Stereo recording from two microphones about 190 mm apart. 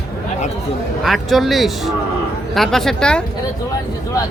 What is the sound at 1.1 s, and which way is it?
A man's voice, centre (ahead or behind).